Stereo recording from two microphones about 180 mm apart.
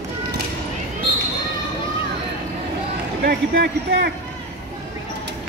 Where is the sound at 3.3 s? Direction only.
65° right (ahead or behind).